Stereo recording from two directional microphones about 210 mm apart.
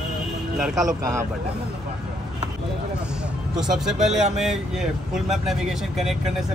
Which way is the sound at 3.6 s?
Centre (ahead or behind).